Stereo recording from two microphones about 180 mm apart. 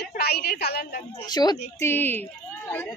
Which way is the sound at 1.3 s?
20° left (ahead or behind).